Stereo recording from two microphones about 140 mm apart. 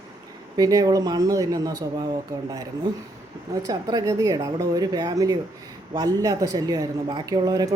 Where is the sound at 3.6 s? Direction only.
25° right (ahead or behind).